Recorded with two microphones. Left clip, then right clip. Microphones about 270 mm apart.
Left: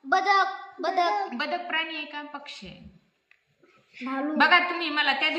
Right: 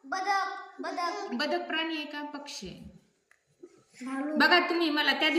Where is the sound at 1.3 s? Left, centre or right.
Centre.